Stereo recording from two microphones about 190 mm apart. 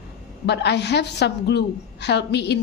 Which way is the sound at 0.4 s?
60° left (ahead or behind).